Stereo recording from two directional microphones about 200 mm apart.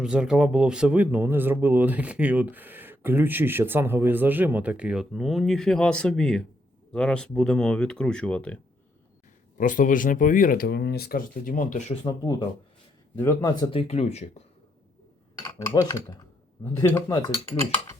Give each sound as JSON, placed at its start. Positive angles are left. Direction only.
{"t": 0.0, "sound": "speech", "side_deg": -5}
{"t": 9.6, "sound": "speech", "side_deg": 40}
{"t": 12.0, "sound": "speech", "side_deg": 20}
{"t": 13.7, "sound": "speech", "side_deg": 30}
{"t": 15.4, "sound": "speech", "side_deg": 20}